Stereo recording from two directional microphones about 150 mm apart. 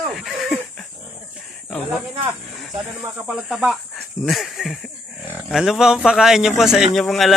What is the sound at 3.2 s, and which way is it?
A man's voice, 5° right (ahead or behind).